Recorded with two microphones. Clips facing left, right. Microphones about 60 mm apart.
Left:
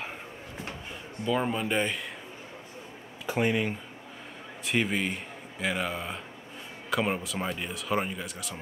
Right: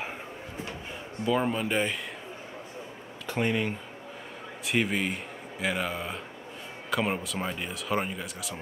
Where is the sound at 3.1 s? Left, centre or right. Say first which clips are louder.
Left 1 dB; centre.